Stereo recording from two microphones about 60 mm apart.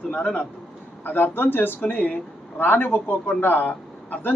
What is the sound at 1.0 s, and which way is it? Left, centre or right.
A man's voice, left.